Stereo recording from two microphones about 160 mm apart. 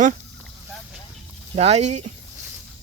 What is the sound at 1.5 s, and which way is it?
Speech, 45° right (ahead or behind).